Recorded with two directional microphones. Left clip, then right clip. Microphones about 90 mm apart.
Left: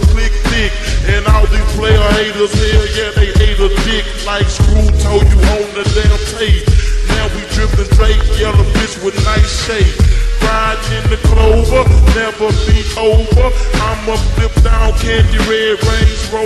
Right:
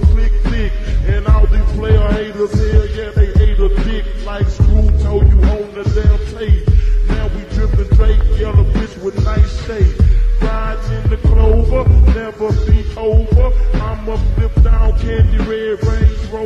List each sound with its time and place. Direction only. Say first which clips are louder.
0.5 s music: left 9 dB; 40° left (ahead or behind)